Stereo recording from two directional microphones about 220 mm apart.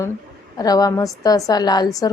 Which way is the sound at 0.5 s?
15° left (ahead or behind).